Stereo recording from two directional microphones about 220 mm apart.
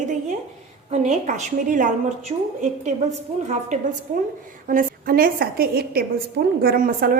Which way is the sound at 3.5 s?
35° right (ahead or behind).